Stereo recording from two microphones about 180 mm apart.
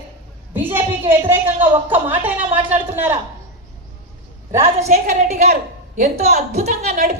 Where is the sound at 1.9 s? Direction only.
10° right (ahead or behind).